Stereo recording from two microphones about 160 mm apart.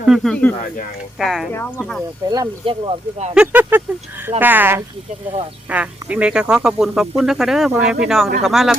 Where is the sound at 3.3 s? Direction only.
10° right (ahead or behind).